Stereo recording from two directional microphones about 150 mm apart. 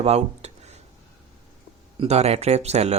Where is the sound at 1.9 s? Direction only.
45° right (ahead or behind).